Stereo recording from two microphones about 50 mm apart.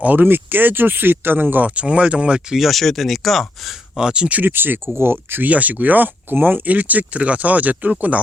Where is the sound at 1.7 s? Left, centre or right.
Right.